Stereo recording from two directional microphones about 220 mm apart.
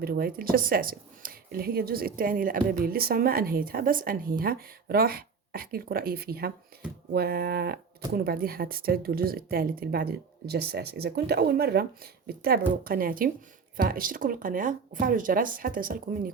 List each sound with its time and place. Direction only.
0.0 s a woman's voice: 45° right (ahead or behind)